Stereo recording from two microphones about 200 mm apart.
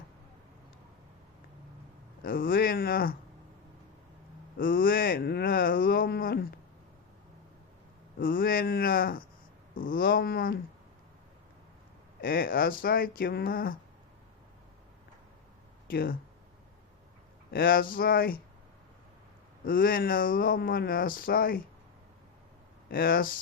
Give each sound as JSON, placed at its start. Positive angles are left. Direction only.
{"t": 2.2, "sound": "speech", "side_deg": 45}
{"t": 4.5, "sound": "speech", "side_deg": 45}
{"t": 8.2, "sound": "speech", "side_deg": 45}
{"t": 12.2, "sound": "speech", "side_deg": 45}
{"t": 15.9, "sound": "speech", "side_deg": 45}
{"t": 17.5, "sound": "speech", "side_deg": 45}
{"t": 19.6, "sound": "speech", "side_deg": 45}
{"t": 22.9, "sound": "speech", "side_deg": 45}